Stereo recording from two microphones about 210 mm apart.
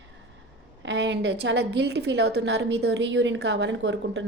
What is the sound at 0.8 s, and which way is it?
A woman's voice, 55° right (ahead or behind).